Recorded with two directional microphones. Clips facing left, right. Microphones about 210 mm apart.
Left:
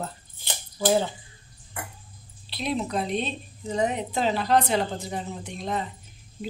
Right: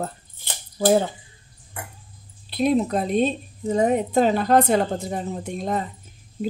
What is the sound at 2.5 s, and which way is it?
Speech, 50° right (ahead or behind).